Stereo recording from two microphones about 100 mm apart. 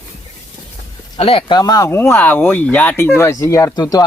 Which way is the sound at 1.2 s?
70° left (ahead or behind).